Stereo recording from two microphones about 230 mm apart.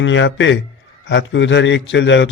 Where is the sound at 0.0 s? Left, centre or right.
Left.